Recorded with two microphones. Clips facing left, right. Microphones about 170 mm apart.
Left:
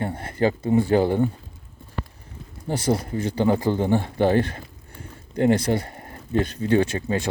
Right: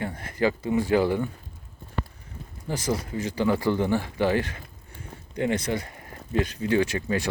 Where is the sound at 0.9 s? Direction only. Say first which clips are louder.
Even; 30° left (ahead or behind).